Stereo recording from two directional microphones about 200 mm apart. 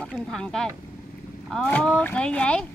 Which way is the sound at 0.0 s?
5° left (ahead or behind).